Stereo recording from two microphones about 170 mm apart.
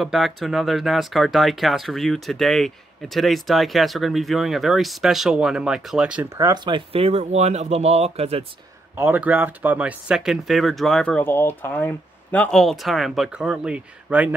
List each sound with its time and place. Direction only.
0.0 s speech: centre (ahead or behind)
6.3 s speech: 20° right (ahead or behind)
8.9 s speech: 10° right (ahead or behind)